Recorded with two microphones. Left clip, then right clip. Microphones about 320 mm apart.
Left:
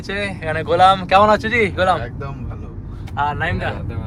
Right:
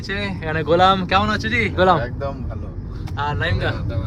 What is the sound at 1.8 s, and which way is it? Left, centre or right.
Speech, centre.